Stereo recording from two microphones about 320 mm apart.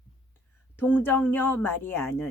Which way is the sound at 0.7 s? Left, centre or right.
Centre.